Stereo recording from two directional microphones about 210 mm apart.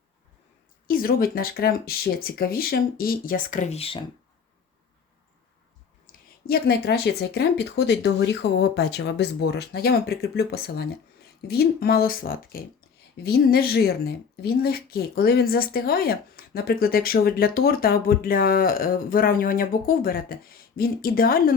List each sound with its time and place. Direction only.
0.9 s speech: 45° left (ahead or behind); by 4.0 s 25° left (ahead or behind)
6.1 s a sound: 40° left (ahead or behind)
6.5 s speech: 50° left (ahead or behind)